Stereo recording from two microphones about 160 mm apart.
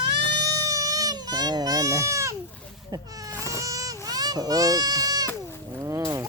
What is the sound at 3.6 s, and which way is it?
Vehicle, 20° right (ahead or behind).